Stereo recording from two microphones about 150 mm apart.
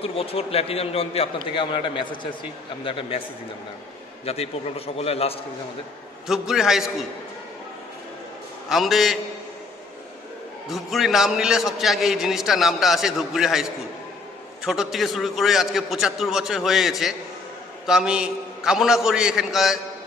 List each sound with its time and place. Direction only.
0.0 s a man's voice: 40° left (ahead or behind)
4.3 s a man's voice: 40° left (ahead or behind)
6.2 s a man's voice: centre (ahead or behind)
8.6 s a man's voice: centre (ahead or behind)
10.7 s a man's voice: centre (ahead or behind)